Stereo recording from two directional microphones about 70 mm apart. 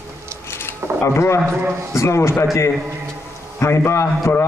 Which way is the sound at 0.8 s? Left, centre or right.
Right.